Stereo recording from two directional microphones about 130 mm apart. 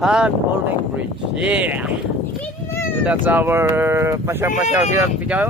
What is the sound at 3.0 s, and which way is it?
Speech, 15° right (ahead or behind).